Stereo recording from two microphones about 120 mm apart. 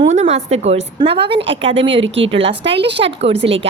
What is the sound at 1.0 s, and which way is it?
A woman's voice, 45° right (ahead or behind).